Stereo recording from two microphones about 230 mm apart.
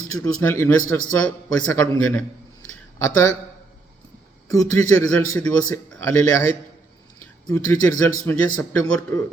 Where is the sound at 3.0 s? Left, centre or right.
Centre.